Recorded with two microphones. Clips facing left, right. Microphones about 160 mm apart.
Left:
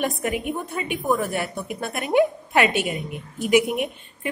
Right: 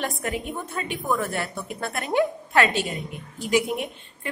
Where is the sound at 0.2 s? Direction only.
15° left (ahead or behind).